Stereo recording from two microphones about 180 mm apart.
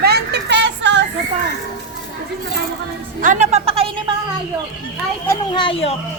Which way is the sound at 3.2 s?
40° right (ahead or behind).